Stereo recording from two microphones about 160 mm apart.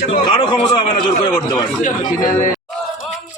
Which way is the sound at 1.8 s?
60° left (ahead or behind).